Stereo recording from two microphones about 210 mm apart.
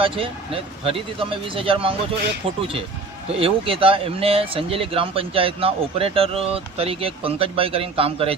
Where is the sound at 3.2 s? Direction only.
25° right (ahead or behind).